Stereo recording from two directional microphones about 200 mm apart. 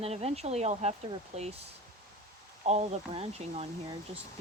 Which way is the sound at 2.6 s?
30° right (ahead or behind).